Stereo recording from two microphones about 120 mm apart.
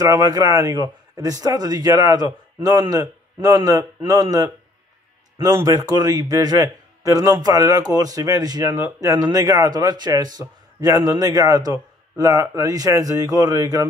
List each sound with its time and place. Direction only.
0.0 s a man's voice: 30° right (ahead or behind)